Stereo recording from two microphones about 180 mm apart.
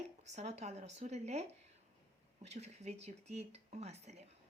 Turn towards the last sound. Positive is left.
turn(degrees=-35)  # may be behind; listen again after turning